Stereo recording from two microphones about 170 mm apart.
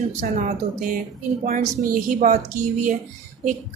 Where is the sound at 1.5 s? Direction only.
55° right (ahead or behind).